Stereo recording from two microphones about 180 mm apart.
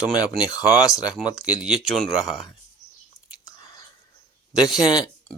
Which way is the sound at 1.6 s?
Centre (ahead or behind).